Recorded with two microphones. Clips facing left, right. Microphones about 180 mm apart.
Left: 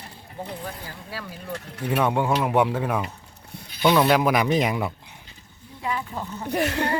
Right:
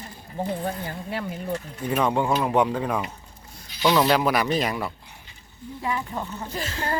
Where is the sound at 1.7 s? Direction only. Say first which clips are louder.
Left 5 dB; 70° left (ahead or behind).